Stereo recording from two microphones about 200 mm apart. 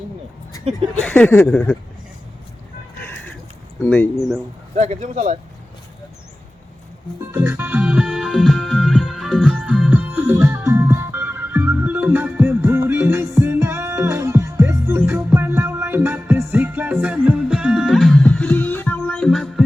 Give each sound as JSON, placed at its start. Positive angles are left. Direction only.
{"t": 0.9, "sound": "speech", "side_deg": 10}
{"t": 3.8, "sound": "speech", "side_deg": 5}
{"t": 4.8, "sound": "speech", "side_deg": -35}
{"t": 7.2, "sound": "music", "side_deg": -15}